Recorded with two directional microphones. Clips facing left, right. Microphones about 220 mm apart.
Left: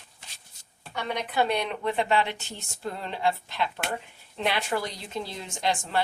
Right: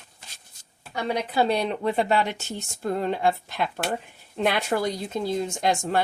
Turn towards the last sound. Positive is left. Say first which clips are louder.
# right 4 dB
turn(degrees=-45)  # may be behind; listen again after turning